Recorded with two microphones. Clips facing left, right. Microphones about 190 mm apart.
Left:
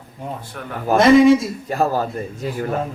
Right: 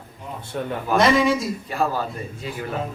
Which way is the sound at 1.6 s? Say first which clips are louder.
Left 5 dB; 45° left (ahead or behind).